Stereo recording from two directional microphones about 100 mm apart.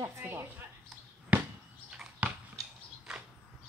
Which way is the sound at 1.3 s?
15° right (ahead or behind).